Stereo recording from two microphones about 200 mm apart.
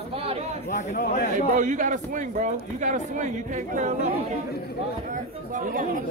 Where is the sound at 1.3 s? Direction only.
40° right (ahead or behind).